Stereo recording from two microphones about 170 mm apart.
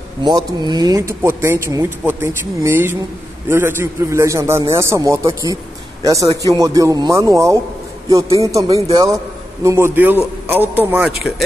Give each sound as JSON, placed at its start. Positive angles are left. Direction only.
{"t": 0.2, "sound": "speech", "side_deg": -25}